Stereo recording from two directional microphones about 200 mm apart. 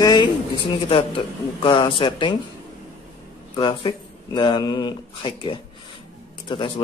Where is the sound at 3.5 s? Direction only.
25° left (ahead or behind).